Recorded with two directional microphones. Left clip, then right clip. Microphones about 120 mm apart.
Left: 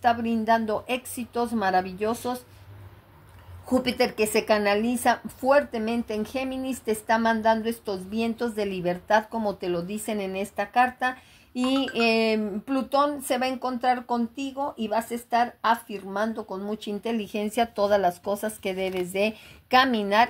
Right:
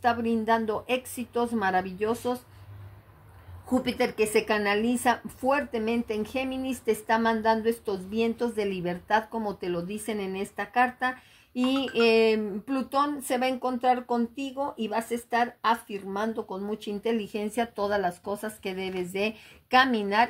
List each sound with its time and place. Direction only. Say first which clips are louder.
0.0 s a woman's voice: left 2 dB; 10° left (ahead or behind); by 2.4 s 30° left (ahead or behind)
3.7 s a woman's voice: left 3 dB; 45° left (ahead or behind); by 17.5 s 15° left (ahead or behind)
17.6 s speech: left 6 dB; 30° left (ahead or behind)